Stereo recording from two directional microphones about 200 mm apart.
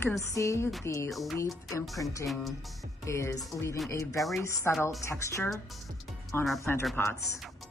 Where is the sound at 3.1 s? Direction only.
15° left (ahead or behind).